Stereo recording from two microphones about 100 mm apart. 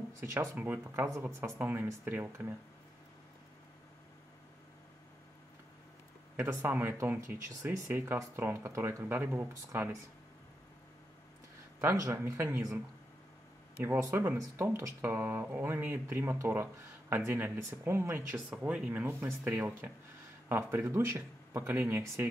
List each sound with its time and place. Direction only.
0.2 s speech: 25° right (ahead or behind)
0.6 s speech: 15° right (ahead or behind)
6.3 s speech: 20° right (ahead or behind)
11.8 s speech: 25° right (ahead or behind)
14.0 s speech: 25° right (ahead or behind)
19.2 s speech: 25° right (ahead or behind)